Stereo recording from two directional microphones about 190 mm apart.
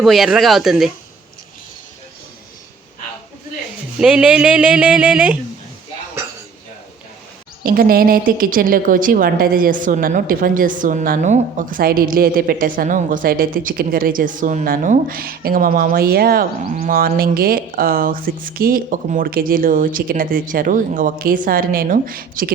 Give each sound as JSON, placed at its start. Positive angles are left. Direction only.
{"t": 0.0, "sound": "speech", "side_deg": 0}
{"t": 3.9, "sound": "speech", "side_deg": -5}
{"t": 7.6, "sound": "a woman's voice", "side_deg": -50}